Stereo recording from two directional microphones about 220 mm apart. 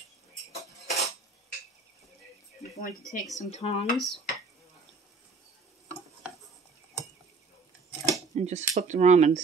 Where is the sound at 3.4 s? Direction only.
30° left (ahead or behind).